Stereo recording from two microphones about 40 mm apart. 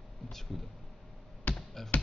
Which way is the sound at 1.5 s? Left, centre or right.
Left.